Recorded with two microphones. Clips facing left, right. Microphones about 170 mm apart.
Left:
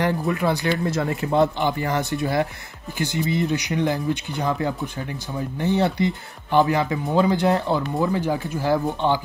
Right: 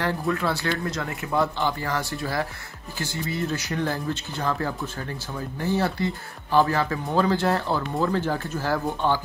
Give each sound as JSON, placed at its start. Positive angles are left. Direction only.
{"t": 0.0, "sound": "speech", "side_deg": 15}
{"t": 0.8, "sound": "speech", "side_deg": 25}